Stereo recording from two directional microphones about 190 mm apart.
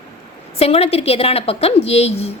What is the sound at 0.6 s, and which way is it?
A woman's voice, 30° left (ahead or behind).